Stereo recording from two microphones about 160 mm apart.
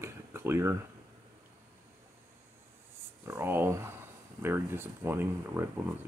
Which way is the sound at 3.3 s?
15° right (ahead or behind).